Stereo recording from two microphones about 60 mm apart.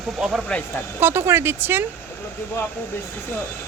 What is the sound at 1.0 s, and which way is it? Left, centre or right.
Speech, right.